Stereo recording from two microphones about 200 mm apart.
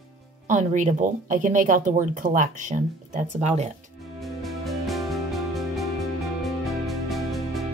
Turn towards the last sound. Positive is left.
turn(degrees=0)  # may be behind; listen again after turning